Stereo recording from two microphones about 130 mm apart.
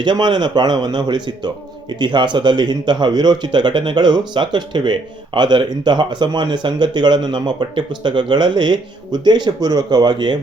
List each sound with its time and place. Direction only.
0.0 s speech: 35° right (ahead or behind)